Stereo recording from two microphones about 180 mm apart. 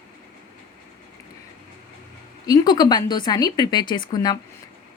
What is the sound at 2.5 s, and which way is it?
Speech, 20° left (ahead or behind).